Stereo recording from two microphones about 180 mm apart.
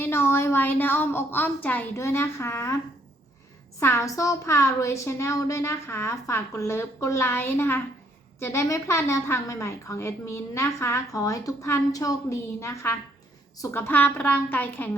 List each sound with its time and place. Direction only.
0.0 s a woman's voice: 15° left (ahead or behind)
3.8 s a woman's voice: 15° left (ahead or behind)